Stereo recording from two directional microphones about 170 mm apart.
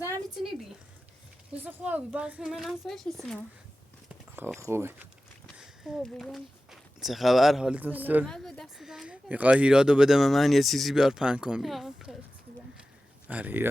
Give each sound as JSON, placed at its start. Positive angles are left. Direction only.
{"t": 1.6, "sound": "speech", "side_deg": -10}
{"t": 4.4, "sound": "speech", "side_deg": -15}
{"t": 5.5, "sound": "speech", "side_deg": -5}
{"t": 8.2, "sound": "speech", "side_deg": 5}
{"t": 13.2, "sound": "speech", "side_deg": -10}